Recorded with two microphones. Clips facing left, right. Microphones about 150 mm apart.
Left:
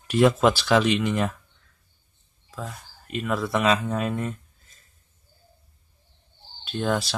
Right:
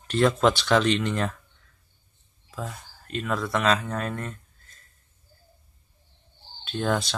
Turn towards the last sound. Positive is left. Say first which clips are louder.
# left 1 dB
turn(degrees=0)  # may be behind; listen again after turning